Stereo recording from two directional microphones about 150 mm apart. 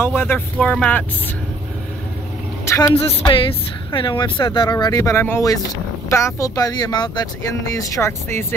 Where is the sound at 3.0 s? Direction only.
35° left (ahead or behind).